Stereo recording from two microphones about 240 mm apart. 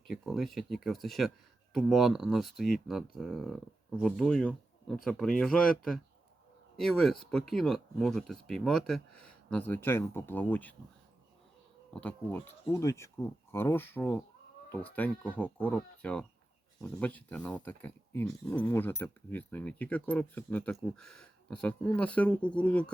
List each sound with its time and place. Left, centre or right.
0.1 s speech: centre
11.9 s speech: centre